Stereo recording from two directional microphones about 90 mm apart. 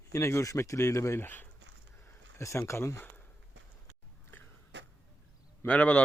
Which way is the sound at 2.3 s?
30° left (ahead or behind).